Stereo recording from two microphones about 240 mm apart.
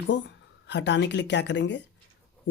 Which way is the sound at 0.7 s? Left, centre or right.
Left.